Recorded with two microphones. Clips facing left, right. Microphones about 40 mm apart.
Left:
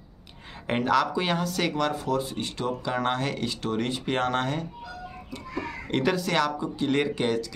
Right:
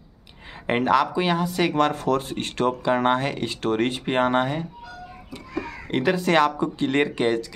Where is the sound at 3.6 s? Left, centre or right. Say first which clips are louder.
Right 7 dB; right.